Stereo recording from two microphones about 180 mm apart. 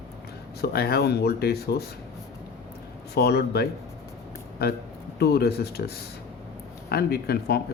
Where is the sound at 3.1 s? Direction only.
65° left (ahead or behind).